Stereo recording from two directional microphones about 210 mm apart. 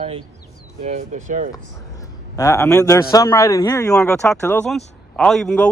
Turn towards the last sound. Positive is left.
turn(degrees=5)  # may be behind; listen again after turning